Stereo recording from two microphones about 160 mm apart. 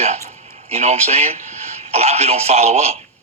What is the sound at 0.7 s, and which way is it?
Speech, 45° right (ahead or behind).